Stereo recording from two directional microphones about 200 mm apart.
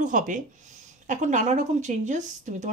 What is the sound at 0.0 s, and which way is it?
A woman's voice, 40° right (ahead or behind).